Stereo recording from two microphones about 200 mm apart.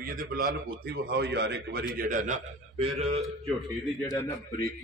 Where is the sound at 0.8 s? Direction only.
55° right (ahead or behind); by 2.9 s 40° right (ahead or behind).